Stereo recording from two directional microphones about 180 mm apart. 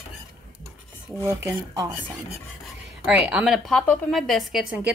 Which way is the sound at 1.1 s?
15° right (ahead or behind).